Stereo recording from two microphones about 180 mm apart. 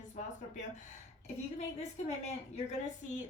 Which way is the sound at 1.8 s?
40° left (ahead or behind).